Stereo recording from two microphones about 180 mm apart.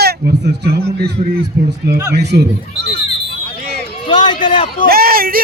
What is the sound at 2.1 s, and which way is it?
Speech, 70° right (ahead or behind).